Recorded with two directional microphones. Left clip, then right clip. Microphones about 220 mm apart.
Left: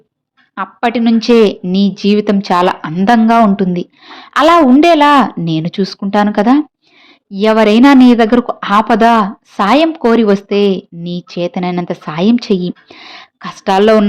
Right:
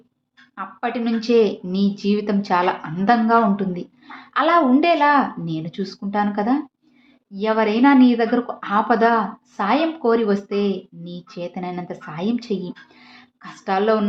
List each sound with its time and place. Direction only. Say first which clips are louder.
0.5 s a woman's voice: left 10 dB; 45° left (ahead or behind)